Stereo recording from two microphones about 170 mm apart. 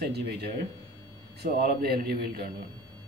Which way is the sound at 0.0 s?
70° right (ahead or behind).